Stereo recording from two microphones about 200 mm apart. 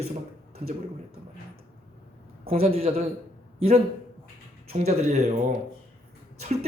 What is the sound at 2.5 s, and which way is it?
A man's voice, 30° right (ahead or behind).